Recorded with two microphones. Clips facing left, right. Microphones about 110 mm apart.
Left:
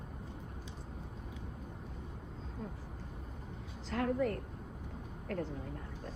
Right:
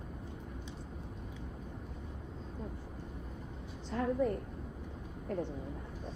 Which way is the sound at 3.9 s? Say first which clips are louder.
Right 1 dB; 90° left.